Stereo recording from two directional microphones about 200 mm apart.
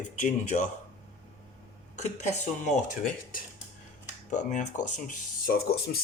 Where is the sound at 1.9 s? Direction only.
35° left (ahead or behind).